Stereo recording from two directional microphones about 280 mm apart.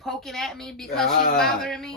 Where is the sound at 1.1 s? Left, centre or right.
Left.